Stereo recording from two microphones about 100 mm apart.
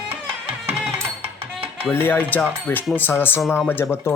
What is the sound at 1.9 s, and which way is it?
Speech, 20° left (ahead or behind).